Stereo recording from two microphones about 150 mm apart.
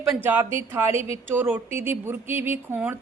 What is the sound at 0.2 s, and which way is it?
A woman's voice, 15° right (ahead or behind).